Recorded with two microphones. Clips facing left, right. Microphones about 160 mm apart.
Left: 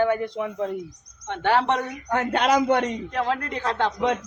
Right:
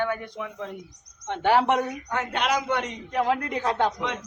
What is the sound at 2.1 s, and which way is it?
Speech, 40° left (ahead or behind).